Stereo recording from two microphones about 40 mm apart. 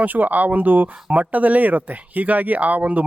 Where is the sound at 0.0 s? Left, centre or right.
Right.